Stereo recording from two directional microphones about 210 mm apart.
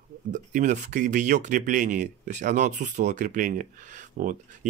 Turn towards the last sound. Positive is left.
turn(degrees=-40)  # may be behind; listen again after turning